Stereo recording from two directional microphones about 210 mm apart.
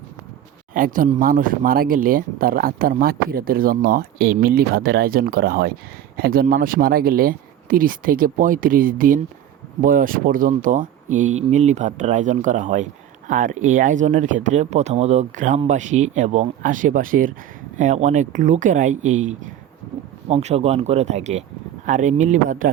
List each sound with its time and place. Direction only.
0.7 s speech: 40° right (ahead or behind)